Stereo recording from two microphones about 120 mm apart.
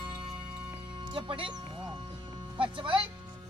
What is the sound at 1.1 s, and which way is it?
Music, 45° right (ahead or behind).